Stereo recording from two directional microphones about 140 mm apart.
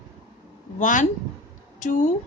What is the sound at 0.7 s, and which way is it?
Speech, 65° left (ahead or behind).